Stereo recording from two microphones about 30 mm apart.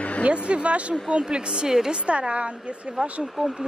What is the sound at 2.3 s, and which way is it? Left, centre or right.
Speech, right.